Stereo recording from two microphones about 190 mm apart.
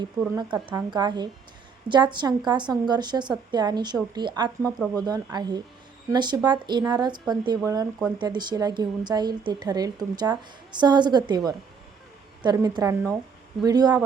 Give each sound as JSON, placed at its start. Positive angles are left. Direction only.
{"t": 0.5, "sound": "a woman's voice", "side_deg": -25}